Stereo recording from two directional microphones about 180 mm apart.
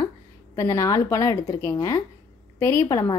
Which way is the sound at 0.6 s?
15° left (ahead or behind).